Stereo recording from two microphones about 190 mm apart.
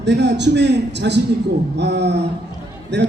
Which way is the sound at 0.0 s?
65° right (ahead or behind).